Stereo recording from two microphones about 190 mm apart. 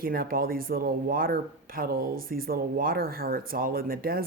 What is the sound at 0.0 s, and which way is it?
Speech, 50° right (ahead or behind).